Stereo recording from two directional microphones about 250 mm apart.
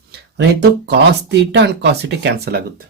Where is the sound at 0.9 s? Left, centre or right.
Right.